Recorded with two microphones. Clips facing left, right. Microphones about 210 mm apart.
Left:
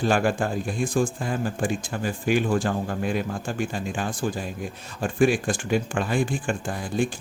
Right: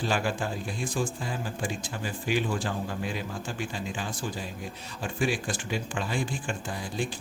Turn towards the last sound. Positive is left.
turn(degrees=50)  # may be behind; listen again after turning